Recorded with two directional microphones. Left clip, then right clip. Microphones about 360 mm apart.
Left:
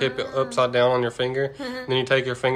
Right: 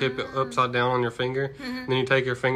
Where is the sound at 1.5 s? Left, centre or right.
Centre.